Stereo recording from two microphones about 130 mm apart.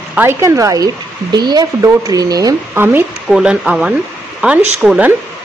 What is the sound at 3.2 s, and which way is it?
Speech, 5° right (ahead or behind).